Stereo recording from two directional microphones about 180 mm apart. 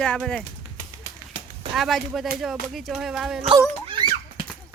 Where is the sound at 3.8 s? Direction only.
25° right (ahead or behind).